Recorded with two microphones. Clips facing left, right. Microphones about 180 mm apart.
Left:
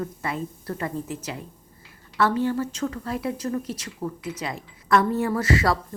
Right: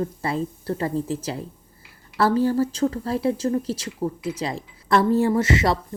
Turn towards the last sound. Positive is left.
turn(degrees=-25)  # may be behind; listen again after turning